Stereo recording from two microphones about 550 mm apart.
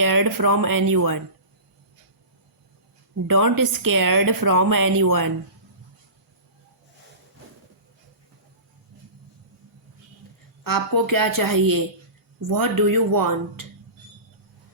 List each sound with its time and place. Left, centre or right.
0.0 s a woman's voice: right
3.2 s a woman's voice: right
10.7 s a woman's voice: right